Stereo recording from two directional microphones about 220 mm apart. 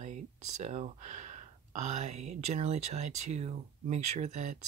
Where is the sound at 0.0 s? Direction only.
30° right (ahead or behind).